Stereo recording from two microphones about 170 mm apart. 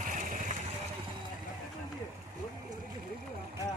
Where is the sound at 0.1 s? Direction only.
50° right (ahead or behind).